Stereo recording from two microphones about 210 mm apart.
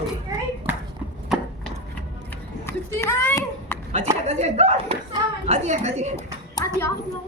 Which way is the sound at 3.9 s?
30° right (ahead or behind).